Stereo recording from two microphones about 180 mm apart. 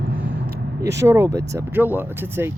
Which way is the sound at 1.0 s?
15° right (ahead or behind).